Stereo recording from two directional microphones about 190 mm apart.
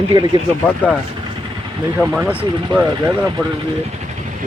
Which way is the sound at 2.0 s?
5° right (ahead or behind).